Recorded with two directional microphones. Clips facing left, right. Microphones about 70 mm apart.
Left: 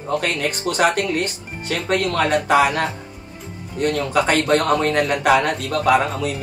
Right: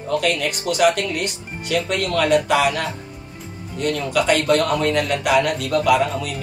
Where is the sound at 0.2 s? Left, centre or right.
Left.